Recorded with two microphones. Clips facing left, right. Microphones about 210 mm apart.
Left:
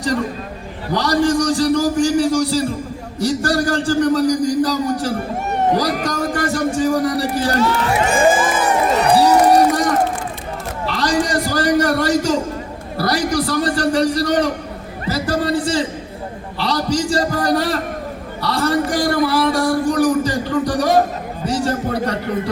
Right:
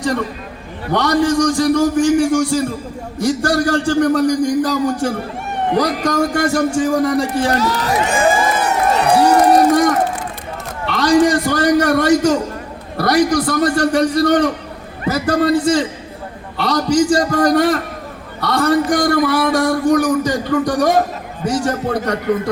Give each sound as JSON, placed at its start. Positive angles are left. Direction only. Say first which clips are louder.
{"t": 0.9, "sound": "speech", "louder": "right 2 dB", "side_deg": 35}
{"t": 7.6, "sound": "speech", "louder": "left 1 dB", "side_deg": -35}
{"t": 8.0, "sound": "crowd", "louder": "left 1 dB", "side_deg": 50}
{"t": 10.8, "sound": "a man's voice", "louder": "right 6 dB", "side_deg": 35}